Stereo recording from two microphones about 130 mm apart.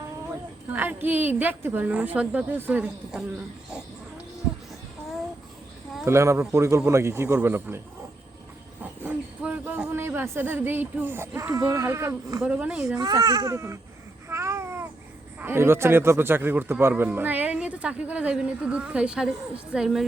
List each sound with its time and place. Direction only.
0.8 s a man's voice: 15° right (ahead or behind)
6.1 s a man's voice: 20° right (ahead or behind)
8.8 s a sound: 10° right (ahead or behind)
12.4 s a woman's voice: 5° right (ahead or behind)
13.0 s a man's voice: 30° right (ahead or behind)
14.3 s babbling: 20° right (ahead or behind)
15.4 s a man's voice: 15° right (ahead or behind)